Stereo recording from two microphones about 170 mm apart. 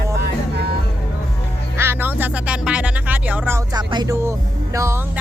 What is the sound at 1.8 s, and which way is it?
Speech, 15° right (ahead or behind).